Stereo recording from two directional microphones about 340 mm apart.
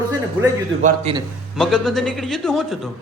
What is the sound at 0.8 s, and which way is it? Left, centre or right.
Speech, centre.